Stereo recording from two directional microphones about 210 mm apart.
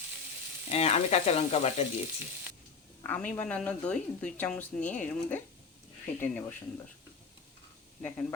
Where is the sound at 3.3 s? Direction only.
5° left (ahead or behind).